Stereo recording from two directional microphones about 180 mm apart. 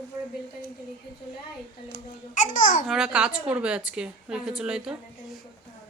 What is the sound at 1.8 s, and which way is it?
Speech, 45° left (ahead or behind).